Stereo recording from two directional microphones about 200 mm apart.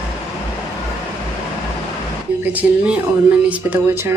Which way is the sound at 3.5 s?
10° right (ahead or behind).